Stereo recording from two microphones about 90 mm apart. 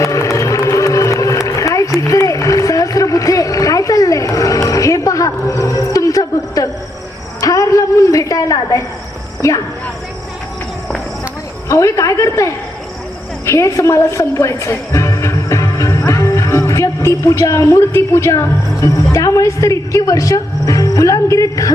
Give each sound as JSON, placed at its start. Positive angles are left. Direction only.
{"t": 0.0, "sound": "a sound", "side_deg": 35}
{"t": 9.4, "sound": "a woman's voice", "side_deg": 35}
{"t": 11.7, "sound": "a woman's voice", "side_deg": 35}
{"t": 13.4, "sound": "music", "side_deg": 35}
{"t": 19.1, "sound": "speech", "side_deg": 35}